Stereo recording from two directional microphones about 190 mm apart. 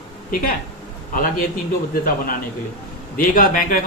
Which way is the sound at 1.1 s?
50° left (ahead or behind).